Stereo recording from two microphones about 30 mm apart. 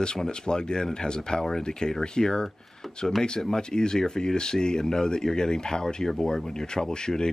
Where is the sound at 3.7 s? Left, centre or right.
Left.